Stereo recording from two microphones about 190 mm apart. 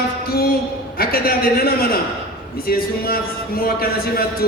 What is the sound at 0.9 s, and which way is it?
A man's voice, 50° left (ahead or behind).